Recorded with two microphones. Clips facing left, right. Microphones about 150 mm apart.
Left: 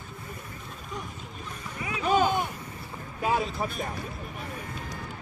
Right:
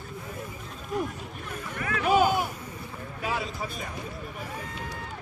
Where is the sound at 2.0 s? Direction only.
5° right (ahead or behind).